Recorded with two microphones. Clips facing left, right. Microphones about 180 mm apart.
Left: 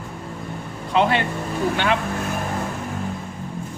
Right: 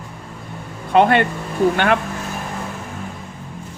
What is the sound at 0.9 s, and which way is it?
Speech, 55° right (ahead or behind).